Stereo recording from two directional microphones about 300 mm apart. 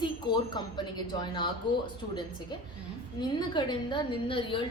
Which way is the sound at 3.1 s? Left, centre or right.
Centre.